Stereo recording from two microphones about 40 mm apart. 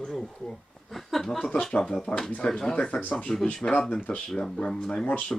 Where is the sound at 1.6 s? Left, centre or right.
Centre.